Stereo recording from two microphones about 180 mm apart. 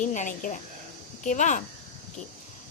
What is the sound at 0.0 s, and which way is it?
Speech, 45° left (ahead or behind).